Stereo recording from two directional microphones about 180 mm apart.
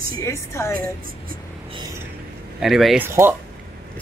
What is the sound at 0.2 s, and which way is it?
Speech, 15° left (ahead or behind).